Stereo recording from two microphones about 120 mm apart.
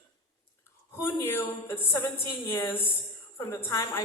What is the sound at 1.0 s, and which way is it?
A woman's voice, 20° left (ahead or behind).